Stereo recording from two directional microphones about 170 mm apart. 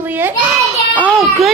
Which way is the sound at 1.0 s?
5° left (ahead or behind).